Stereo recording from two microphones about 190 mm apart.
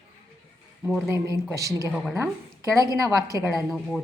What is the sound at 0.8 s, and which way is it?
Speech, centre (ahead or behind).